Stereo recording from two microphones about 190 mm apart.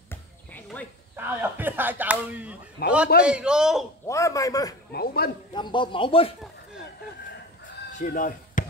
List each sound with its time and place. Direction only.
0.1 s a sound: 10° left (ahead or behind)
1.1 s speech: 10° right (ahead or behind)
2.8 s a man's voice: 55° left (ahead or behind)
3.3 s a man's voice: 5° right (ahead or behind)
4.1 s a man's voice: 15° left (ahead or behind)
4.9 s a man's voice: 55° left (ahead or behind)
5.5 s speech: 25° left (ahead or behind)
8.0 s speech: 45° left (ahead or behind)